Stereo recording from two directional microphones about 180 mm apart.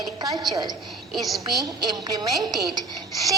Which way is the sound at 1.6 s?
20° right (ahead or behind).